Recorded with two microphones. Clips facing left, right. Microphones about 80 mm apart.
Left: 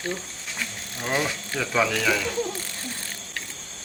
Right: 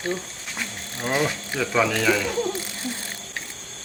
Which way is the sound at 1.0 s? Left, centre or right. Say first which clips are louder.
Right 2 dB; centre.